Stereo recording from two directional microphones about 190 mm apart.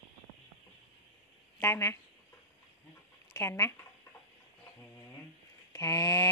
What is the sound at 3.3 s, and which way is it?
Speech, 15° left (ahead or behind).